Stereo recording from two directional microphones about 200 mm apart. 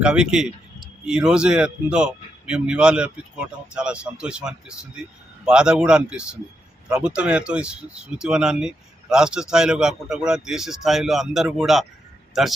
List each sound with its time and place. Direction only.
0.0 s speech: 5° right (ahead or behind)